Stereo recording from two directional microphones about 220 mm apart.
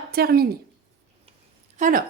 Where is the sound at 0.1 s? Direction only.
45° right (ahead or behind).